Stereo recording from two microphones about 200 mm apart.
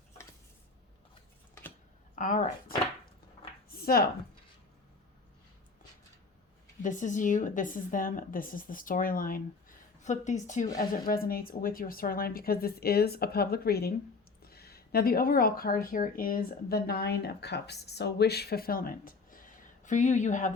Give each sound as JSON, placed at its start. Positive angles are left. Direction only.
{"t": 2.1, "sound": "speech", "side_deg": 40}
{"t": 3.7, "sound": "a sound", "side_deg": 50}
{"t": 6.8, "sound": "a woman's voice", "side_deg": 40}